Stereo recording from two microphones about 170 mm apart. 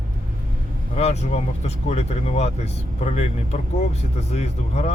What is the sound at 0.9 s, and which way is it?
Speech, 40° left (ahead or behind).